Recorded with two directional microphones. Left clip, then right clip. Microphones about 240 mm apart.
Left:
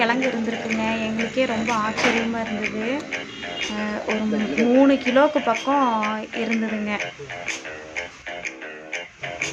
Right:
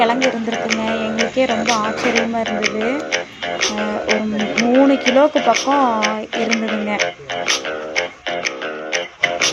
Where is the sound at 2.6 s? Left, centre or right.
Right.